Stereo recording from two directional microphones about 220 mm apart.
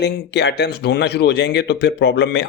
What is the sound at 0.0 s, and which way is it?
Speech, 50° left (ahead or behind).